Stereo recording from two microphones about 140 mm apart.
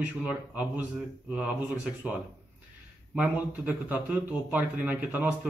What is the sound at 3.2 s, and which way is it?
A man's voice, 10° right (ahead or behind).